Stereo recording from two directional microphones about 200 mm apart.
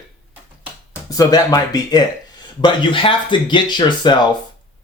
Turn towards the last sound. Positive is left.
turn(degrees=20)  # may be behind; listen again after turning